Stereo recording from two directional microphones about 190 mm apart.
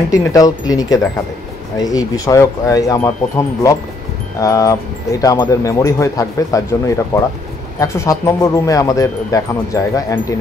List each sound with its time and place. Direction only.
0.1 s speech: 20° left (ahead or behind)